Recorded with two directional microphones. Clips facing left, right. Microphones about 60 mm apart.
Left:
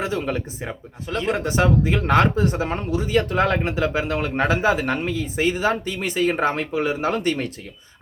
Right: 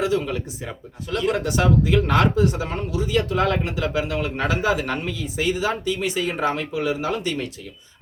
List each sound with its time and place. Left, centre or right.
0.0 s speech: left